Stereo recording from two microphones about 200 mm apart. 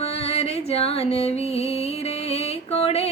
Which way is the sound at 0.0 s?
30° left (ahead or behind).